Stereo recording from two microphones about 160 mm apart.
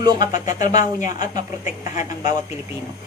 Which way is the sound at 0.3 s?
50° left (ahead or behind).